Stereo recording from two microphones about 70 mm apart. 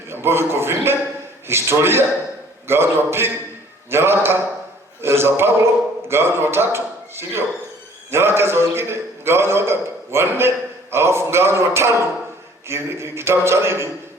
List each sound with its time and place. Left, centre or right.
0.1 s a man's voice: right